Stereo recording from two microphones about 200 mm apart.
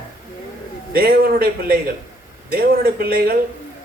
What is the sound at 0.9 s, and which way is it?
Speech, 50° right (ahead or behind).